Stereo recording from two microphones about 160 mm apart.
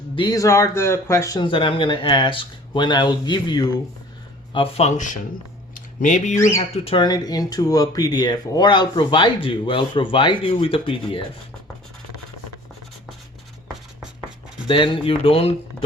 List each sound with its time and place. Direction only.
0.2 s speech: 20° left (ahead or behind)
4.5 s speech: 40° left (ahead or behind)
5.7 s a sound: 55° left (ahead or behind)
6.6 s speech: 35° left (ahead or behind)
14.7 s speech: 35° left (ahead or behind)